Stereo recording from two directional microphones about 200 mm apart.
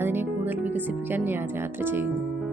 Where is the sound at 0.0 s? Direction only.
10° right (ahead or behind).